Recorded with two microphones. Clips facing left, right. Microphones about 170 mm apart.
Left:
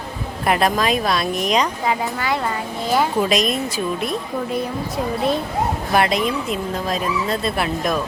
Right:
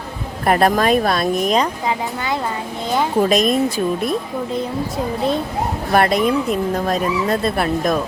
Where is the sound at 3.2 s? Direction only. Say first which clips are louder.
Right 3 dB; 45° right (ahead or behind).